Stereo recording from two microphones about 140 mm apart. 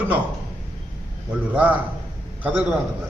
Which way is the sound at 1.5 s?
10° right (ahead or behind).